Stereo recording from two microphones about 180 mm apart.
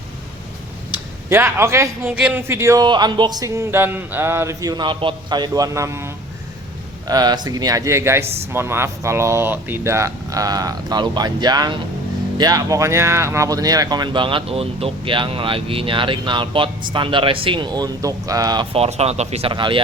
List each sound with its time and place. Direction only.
1.3 s a man's voice: 15° right (ahead or behind)
7.1 s speech: 20° right (ahead or behind)